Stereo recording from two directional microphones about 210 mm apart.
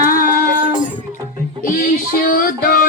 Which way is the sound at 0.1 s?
40° left (ahead or behind).